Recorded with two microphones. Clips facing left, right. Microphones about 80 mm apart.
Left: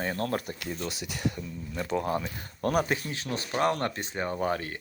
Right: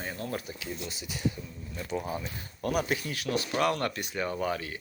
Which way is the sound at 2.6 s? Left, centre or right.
Left.